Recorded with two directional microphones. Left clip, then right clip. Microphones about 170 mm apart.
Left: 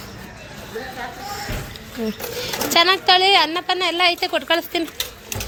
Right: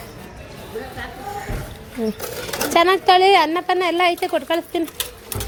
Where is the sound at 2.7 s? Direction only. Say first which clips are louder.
Right 1 dB; 40° right (ahead or behind); by 4.8 s 25° right (ahead or behind).